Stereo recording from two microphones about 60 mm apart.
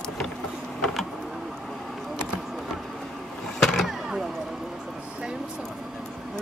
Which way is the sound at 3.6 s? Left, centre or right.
Centre.